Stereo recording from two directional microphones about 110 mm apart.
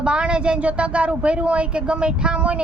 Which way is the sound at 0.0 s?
10° right (ahead or behind).